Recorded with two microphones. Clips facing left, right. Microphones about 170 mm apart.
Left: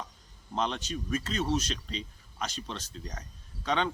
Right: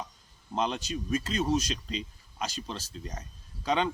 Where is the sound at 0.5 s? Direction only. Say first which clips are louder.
Right 1 dB; 10° right (ahead or behind).